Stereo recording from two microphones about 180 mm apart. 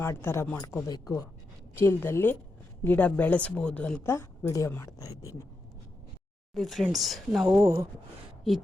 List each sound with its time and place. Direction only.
0.0 s a woman's voice: 15° left (ahead or behind)
6.5 s speech: centre (ahead or behind)
7.4 s speech: 15° right (ahead or behind)